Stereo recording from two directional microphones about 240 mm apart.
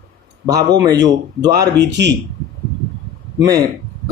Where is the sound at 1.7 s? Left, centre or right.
Right.